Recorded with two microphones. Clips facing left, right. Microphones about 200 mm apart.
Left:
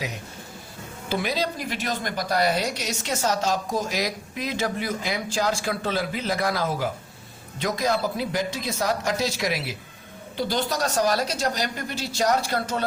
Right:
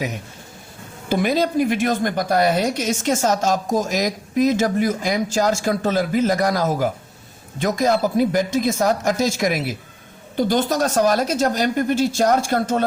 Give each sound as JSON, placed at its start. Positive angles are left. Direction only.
{"t": 1.1, "sound": "a woman's voice", "side_deg": -50}